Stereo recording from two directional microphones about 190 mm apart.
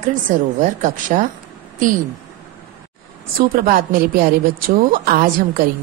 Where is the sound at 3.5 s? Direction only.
50° right (ahead or behind).